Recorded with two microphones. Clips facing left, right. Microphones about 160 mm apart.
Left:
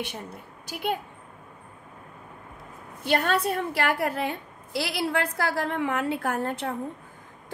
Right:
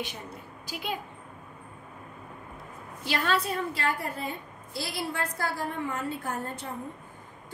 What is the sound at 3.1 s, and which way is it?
Speech, 55° left (ahead or behind).